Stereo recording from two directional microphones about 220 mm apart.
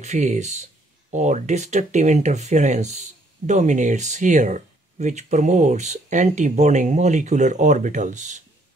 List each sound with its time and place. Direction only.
0.0 s speech: 35° right (ahead or behind)